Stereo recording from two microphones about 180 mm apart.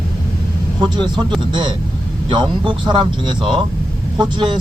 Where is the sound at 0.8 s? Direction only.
25° right (ahead or behind).